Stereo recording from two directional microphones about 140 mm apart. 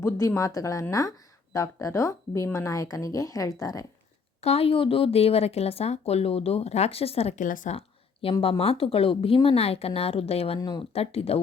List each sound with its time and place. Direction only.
0.0 s speech: 20° left (ahead or behind)
4.4 s speech: 45° left (ahead or behind)
7.3 s speech: 70° left (ahead or behind)
7.7 s speech: 45° left (ahead or behind)
10.6 s speech: 30° left (ahead or behind)
10.9 s speech: 45° left (ahead or behind)